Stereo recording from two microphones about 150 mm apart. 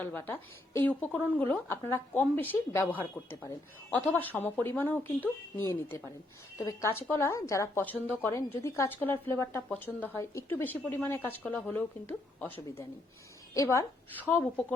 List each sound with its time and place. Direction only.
0.0 s a woman's voice: 15° left (ahead or behind)